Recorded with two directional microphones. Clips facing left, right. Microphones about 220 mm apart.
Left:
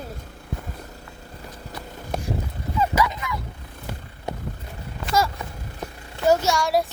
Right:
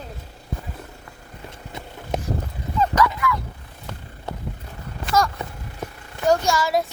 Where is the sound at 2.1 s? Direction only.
20° right (ahead or behind).